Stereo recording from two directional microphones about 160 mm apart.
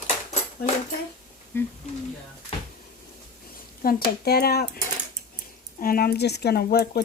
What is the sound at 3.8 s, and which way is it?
Speech, 65° left (ahead or behind).